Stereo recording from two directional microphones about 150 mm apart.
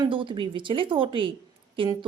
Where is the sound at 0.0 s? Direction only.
35° right (ahead or behind).